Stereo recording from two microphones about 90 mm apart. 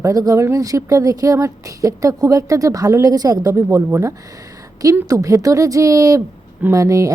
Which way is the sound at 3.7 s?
30° right (ahead or behind).